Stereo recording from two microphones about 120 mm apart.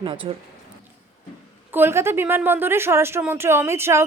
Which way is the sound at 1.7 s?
20° right (ahead or behind).